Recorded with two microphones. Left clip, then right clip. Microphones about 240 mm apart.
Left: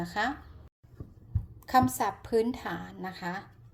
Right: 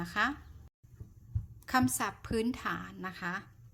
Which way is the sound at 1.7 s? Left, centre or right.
Right.